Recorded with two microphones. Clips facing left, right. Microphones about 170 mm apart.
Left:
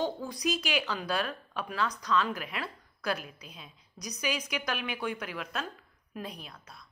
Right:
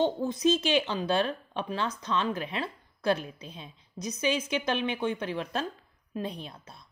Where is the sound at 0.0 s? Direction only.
25° right (ahead or behind).